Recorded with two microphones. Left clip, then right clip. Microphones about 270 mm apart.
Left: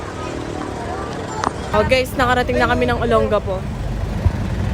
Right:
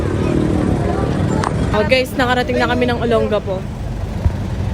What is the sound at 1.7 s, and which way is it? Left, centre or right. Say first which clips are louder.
Speech: right 1 dB; left.